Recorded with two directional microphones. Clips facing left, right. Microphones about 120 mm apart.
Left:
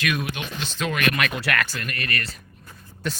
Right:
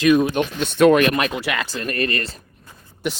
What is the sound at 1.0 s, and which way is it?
Speech, 30° right (ahead or behind).